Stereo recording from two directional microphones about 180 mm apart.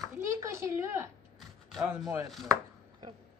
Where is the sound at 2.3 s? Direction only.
Centre (ahead or behind).